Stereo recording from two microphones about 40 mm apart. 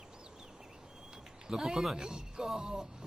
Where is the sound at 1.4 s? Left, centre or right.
Centre.